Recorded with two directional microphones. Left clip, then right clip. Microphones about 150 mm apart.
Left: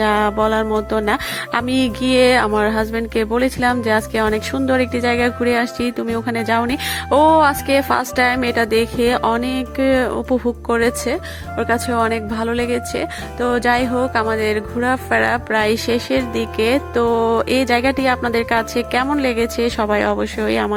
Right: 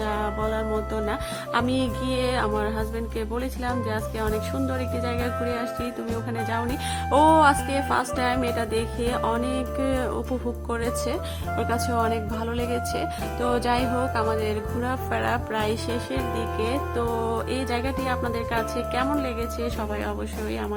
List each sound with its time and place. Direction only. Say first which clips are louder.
0.0 s music: left 11 dB; 35° left (ahead or behind)
6.2 s speech: left 10 dB; 35° left (ahead or behind)